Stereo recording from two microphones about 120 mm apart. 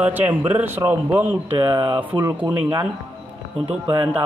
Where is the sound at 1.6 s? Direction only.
40° right (ahead or behind).